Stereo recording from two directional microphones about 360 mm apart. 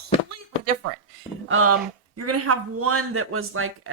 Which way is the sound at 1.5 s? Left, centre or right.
Right.